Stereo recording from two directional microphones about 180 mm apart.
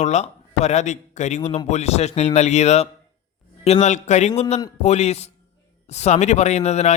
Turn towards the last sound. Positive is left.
turn(degrees=40)  # may be behind; listen again after turning